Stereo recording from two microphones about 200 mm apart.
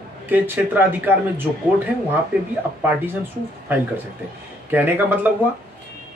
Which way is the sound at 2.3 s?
10° right (ahead or behind).